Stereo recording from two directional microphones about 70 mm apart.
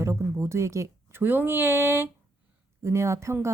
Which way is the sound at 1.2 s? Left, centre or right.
Right.